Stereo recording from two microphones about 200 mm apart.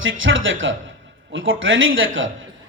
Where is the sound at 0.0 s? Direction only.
75° right (ahead or behind).